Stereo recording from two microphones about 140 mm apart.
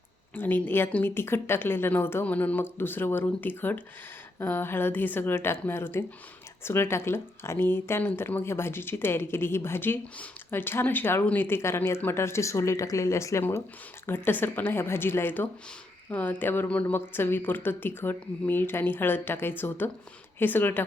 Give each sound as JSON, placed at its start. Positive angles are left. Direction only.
{"t": 0.3, "sound": "speech", "side_deg": 15}